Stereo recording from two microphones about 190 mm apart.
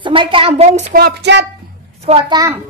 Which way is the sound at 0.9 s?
60° right (ahead or behind).